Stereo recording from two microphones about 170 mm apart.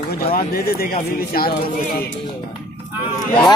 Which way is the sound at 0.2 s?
65° left (ahead or behind).